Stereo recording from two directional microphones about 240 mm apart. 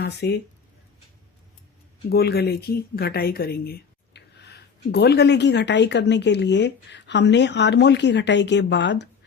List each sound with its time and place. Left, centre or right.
0.0 s speech: left
2.0 s speech: left